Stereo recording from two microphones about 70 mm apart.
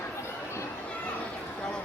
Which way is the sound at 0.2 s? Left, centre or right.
Left.